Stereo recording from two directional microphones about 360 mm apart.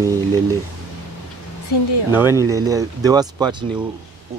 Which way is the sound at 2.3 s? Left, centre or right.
Centre.